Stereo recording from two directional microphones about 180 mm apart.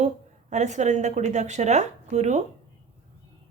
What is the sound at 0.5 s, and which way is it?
Speech, 40° right (ahead or behind).